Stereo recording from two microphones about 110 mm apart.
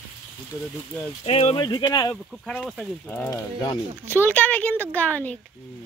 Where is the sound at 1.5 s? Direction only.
40° left (ahead or behind).